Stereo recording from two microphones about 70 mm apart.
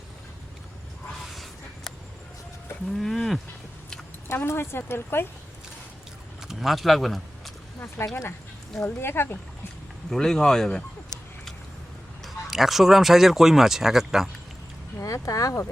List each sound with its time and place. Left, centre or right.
1.3 s a sound: centre
2.9 s livestock: centre
4.4 s speech: left
6.5 s speech: centre
8.0 s speech: left
10.1 s speech: centre
12.2 s speech: centre
14.9 s speech: left